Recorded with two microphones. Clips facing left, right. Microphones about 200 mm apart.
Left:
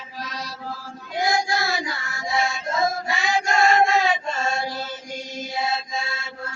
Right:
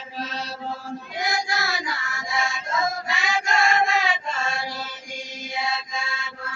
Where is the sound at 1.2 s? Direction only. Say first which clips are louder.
Left 5 dB; 30° left (ahead or behind).